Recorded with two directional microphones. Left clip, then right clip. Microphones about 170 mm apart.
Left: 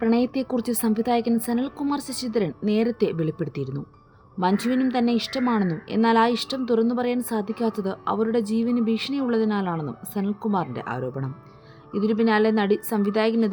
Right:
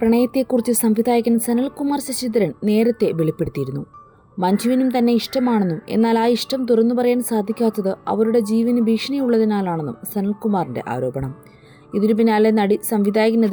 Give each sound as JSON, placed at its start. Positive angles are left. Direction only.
{"t": 0.0, "sound": "a woman's voice", "side_deg": -20}